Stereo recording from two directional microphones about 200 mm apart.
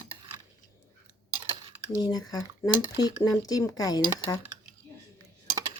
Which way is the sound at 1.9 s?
20° left (ahead or behind).